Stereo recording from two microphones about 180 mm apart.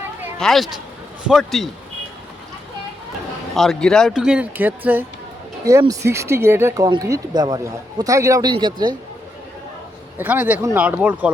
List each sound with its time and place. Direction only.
0.3 s speech: centre (ahead or behind)
3.5 s speech: centre (ahead or behind); by 9.0 s 25° right (ahead or behind)
10.2 s speech: 10° right (ahead or behind)